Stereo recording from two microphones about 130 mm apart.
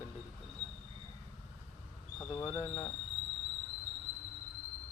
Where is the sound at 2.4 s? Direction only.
25° left (ahead or behind).